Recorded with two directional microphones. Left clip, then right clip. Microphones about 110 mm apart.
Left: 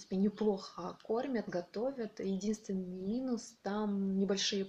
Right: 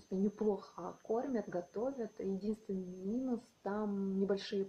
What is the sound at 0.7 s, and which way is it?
Speech, 5° left (ahead or behind).